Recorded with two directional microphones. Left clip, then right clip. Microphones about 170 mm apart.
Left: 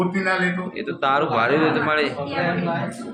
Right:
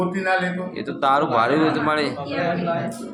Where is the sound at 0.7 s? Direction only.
10° right (ahead or behind).